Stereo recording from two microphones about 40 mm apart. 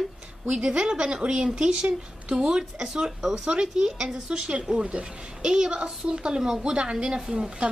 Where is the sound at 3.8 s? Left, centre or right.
Centre.